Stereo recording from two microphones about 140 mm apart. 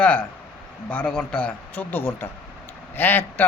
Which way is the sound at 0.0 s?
10° left (ahead or behind).